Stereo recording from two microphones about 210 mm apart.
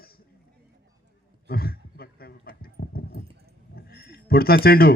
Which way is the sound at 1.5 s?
45° left (ahead or behind).